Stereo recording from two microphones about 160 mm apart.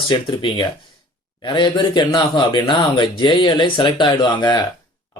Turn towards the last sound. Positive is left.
turn(degrees=25)  # may be behind; listen again after turning